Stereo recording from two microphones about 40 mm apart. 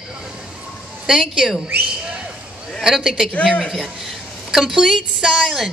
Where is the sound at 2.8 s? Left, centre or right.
Centre.